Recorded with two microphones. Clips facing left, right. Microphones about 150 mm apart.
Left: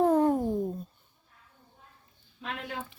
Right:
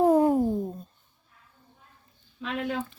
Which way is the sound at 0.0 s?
10° right (ahead or behind).